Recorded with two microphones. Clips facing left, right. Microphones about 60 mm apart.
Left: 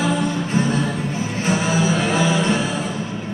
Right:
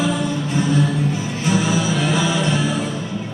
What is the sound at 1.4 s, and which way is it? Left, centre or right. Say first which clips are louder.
Music: even; left.